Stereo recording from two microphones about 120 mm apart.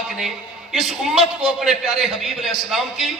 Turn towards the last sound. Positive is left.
turn(degrees=-5)  # may be behind; listen again after turning